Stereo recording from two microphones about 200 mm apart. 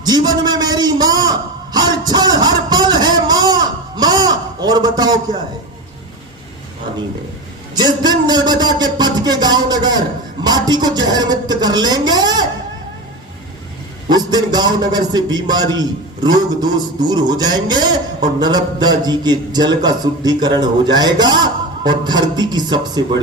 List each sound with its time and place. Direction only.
0.0 s a sound: 20° right (ahead or behind)
7.8 s a man's voice: 20° right (ahead or behind)
14.1 s a man's voice: 20° right (ahead or behind)